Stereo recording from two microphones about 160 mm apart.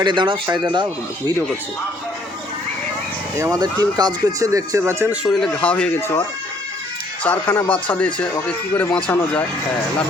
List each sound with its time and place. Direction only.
0.0 s speech: 30° right (ahead or behind)
3.3 s speech: 20° right (ahead or behind)
5.2 s speech: centre (ahead or behind)
7.3 s speech: 10° left (ahead or behind)